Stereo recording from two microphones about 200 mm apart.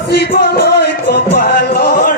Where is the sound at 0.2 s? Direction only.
50° left (ahead or behind).